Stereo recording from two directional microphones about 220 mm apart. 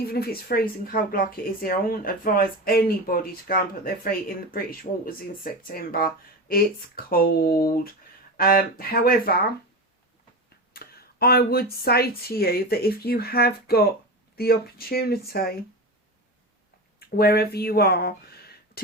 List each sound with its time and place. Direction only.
0.1 s speech: 45° left (ahead or behind)
10.8 s speech: 45° left (ahead or behind)
17.0 s speech: 45° left (ahead or behind)